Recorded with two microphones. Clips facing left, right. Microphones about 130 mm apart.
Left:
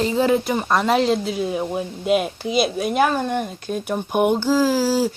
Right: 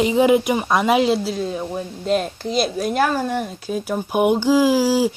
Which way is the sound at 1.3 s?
10° left (ahead or behind).